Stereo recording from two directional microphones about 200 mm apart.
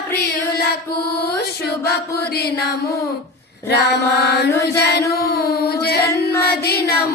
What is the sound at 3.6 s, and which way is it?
Music, 55° left (ahead or behind).